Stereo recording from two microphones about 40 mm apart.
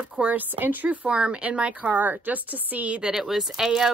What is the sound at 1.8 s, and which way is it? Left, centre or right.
A woman's voice, right.